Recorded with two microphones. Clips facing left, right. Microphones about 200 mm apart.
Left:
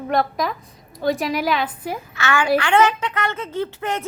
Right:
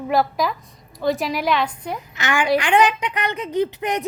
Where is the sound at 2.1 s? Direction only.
15° right (ahead or behind).